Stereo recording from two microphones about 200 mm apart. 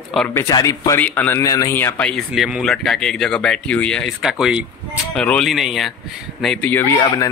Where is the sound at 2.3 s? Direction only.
5° right (ahead or behind).